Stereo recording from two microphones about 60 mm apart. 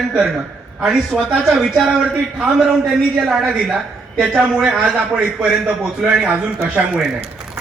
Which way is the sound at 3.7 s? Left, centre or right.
Centre.